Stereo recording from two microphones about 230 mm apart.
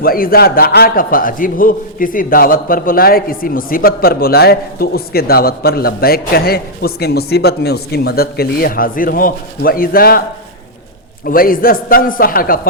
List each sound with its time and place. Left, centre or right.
0.0 s a man's voice: left
11.3 s a man's voice: left